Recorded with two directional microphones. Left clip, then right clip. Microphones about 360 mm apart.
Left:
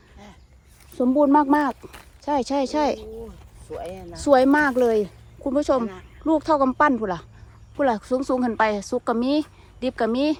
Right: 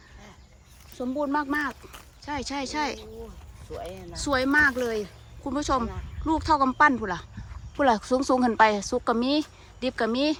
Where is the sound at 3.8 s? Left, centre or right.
Left.